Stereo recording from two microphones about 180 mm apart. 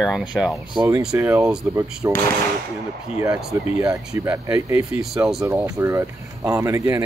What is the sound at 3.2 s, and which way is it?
Speech, 15° right (ahead or behind).